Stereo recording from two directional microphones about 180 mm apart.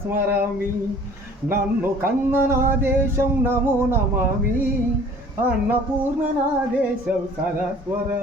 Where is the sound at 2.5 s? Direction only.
15° right (ahead or behind).